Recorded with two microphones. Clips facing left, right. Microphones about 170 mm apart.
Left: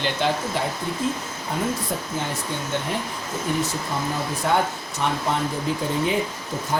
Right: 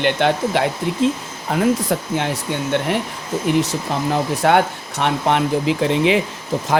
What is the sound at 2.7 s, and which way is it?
Speech, 70° right (ahead or behind).